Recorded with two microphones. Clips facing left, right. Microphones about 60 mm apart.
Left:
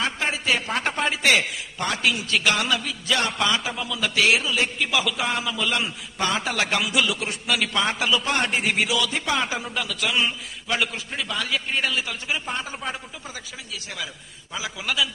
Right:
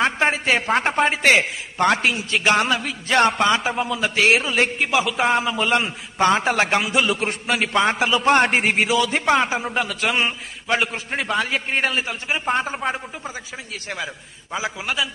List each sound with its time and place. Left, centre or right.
0.0 s a woman's voice: right
7.1 s a man's voice: right
8.3 s a man's voice: right
9.4 s a man's voice: right
11.1 s a man's voice: right
13.8 s a man's voice: right